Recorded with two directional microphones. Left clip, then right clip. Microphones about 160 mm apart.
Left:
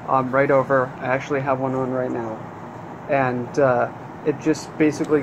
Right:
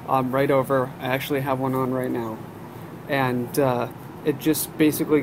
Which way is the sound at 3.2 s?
35° right (ahead or behind).